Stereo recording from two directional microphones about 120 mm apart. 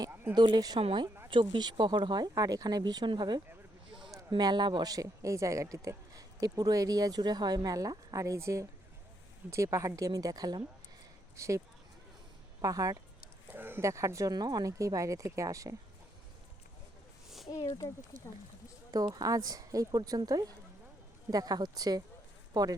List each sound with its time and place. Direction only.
0.3 s speech: 35° right (ahead or behind)
0.8 s a woman's voice: 50° right (ahead or behind); by 11.6 s 25° right (ahead or behind)
12.6 s speech: 30° right (ahead or behind)
13.5 s speech: 20° right (ahead or behind)
17.2 s a sound: centre (ahead or behind)
17.5 s speech: 30° left (ahead or behind)
19.2 s speech: 30° right (ahead or behind)